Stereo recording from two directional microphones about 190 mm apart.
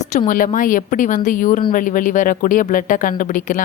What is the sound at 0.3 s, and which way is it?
Speech, 45° left (ahead or behind).